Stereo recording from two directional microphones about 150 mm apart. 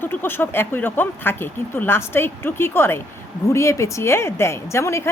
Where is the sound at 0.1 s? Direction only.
15° left (ahead or behind).